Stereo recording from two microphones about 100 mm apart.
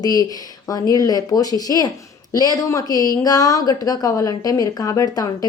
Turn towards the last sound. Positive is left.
turn(degrees=40)  # may be behind; listen again after turning